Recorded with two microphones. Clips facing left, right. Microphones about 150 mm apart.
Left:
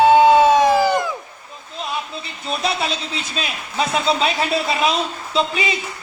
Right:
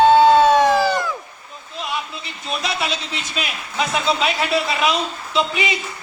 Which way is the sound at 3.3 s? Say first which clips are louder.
Even; 30° left (ahead or behind).